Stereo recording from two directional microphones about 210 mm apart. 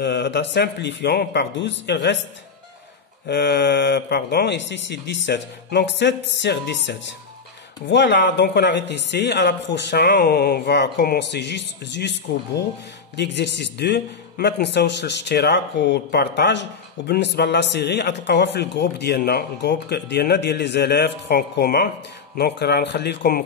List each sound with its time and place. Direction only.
0.0 s a man's voice: 55° left (ahead or behind)
3.3 s a man's voice: 55° left (ahead or behind)